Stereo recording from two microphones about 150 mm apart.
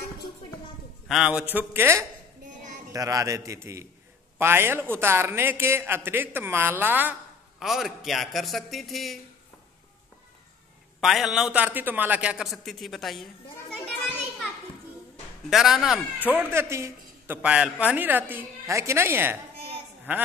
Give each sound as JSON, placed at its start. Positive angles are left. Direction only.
{"t": 1.0, "sound": "a man's voice", "side_deg": -5}
{"t": 11.0, "sound": "a man's voice", "side_deg": 0}
{"t": 15.5, "sound": "a man's voice", "side_deg": -5}
{"t": 16.3, "sound": "a man's voice", "side_deg": -15}